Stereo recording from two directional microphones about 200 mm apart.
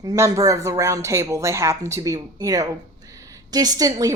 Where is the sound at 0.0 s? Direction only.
20° right (ahead or behind).